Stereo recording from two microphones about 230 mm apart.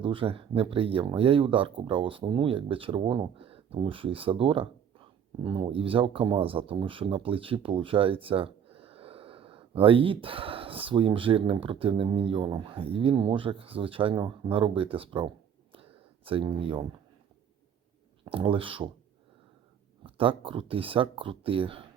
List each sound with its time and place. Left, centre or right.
0.0 s speech: right
15.7 s a sound: right
18.3 s speech: right
20.1 s speech: right